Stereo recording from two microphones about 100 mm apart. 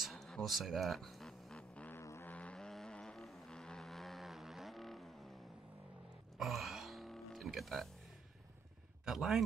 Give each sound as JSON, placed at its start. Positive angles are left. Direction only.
{"t": 0.0, "sound": "a sound", "side_deg": 5}
{"t": 1.9, "sound": "vehicle", "side_deg": 25}
{"t": 2.3, "sound": "vehicle", "side_deg": 10}
{"t": 6.3, "sound": "music", "side_deg": 0}
{"t": 9.0, "sound": "speech", "side_deg": 0}